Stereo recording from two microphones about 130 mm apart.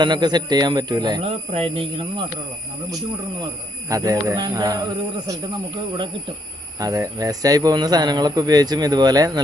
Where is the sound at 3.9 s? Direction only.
25° right (ahead or behind).